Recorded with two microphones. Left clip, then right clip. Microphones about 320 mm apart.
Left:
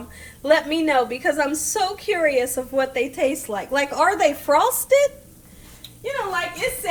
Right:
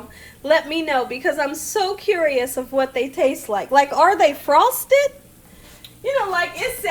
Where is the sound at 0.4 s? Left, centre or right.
Right.